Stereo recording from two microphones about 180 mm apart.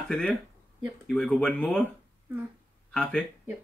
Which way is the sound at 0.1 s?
5° left (ahead or behind).